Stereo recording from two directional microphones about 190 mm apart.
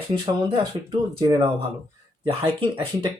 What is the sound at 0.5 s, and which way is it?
Speech, 25° right (ahead or behind).